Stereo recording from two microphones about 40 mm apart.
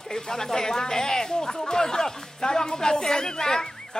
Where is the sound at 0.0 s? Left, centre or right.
Centre.